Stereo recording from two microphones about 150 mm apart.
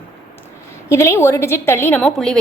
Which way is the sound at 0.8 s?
20° left (ahead or behind).